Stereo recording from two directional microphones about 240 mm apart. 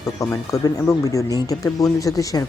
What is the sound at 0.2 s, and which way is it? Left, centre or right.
Speech, centre.